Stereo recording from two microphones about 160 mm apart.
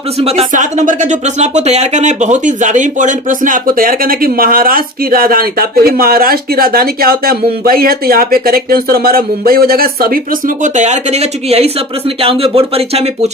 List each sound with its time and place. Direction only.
0.2 s speech: 40° right (ahead or behind)